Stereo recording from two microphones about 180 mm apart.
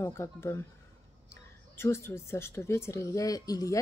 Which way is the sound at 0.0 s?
15° left (ahead or behind).